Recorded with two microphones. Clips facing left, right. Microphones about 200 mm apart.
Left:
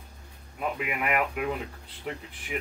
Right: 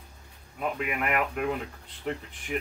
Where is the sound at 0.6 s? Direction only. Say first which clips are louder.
Right 1 dB; 5° left (ahead or behind).